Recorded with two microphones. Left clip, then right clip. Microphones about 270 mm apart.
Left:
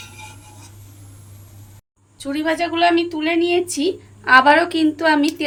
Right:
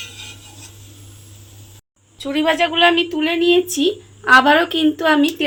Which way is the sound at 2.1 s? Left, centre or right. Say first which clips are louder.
Right 4 dB; centre.